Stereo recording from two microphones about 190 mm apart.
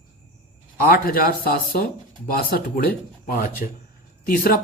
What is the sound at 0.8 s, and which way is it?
Speech, 50° left (ahead or behind).